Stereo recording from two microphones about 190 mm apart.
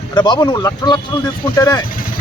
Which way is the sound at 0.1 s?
25° left (ahead or behind).